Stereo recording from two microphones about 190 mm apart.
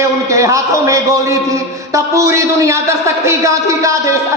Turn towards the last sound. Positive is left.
turn(degrees=-15)  # may be behind; listen again after turning